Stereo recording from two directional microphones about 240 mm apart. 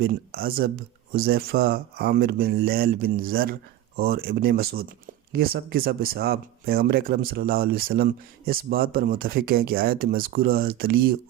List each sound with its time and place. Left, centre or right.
0.0 s speech: right